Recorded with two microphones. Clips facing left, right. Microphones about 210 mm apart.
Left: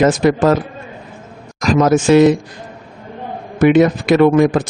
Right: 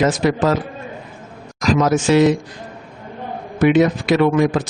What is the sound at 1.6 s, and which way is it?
Speech, 50° left (ahead or behind).